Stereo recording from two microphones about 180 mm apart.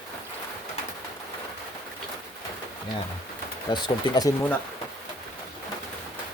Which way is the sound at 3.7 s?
20° left (ahead or behind).